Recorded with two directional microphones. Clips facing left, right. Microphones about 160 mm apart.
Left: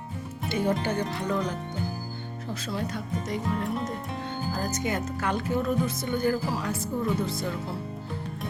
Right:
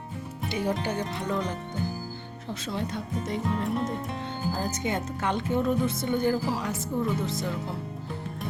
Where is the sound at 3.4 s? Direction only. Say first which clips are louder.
Right 3 dB; centre (ahead or behind).